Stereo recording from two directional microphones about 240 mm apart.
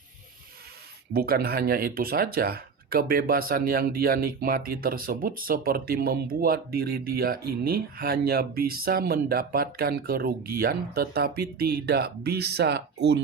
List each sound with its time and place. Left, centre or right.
1.1 s speech: right